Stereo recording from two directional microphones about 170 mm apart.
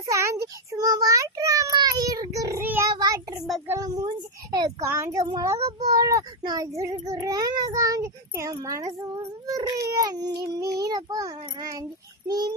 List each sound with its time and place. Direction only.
0.0 s a child's voice: 20° right (ahead or behind)
3.0 s child singing: 20° right (ahead or behind)
3.7 s a child's voice: 20° right (ahead or behind)